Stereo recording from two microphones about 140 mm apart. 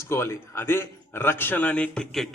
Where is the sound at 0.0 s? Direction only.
20° left (ahead or behind).